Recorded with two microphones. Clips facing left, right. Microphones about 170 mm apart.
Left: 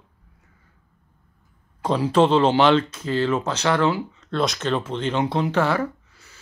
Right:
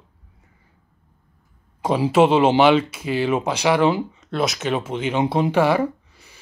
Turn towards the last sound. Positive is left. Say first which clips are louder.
# right 6 dB
turn(degrees=-15)  # may be behind; listen again after turning